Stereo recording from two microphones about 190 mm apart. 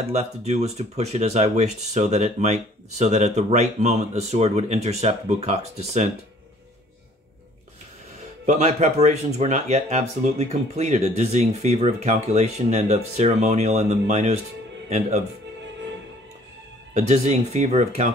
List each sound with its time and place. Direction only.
0.1 s speech: 35° right (ahead or behind)
8.5 s speech: 35° right (ahead or behind)
16.9 s speech: 35° right (ahead or behind)